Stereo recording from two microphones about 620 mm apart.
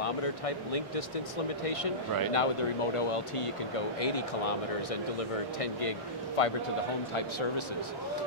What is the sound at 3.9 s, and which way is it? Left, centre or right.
Speech, left.